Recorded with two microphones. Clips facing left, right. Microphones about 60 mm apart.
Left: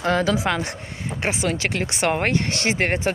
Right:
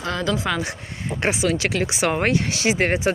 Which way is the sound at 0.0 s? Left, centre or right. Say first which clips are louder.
Left 5 dB; left.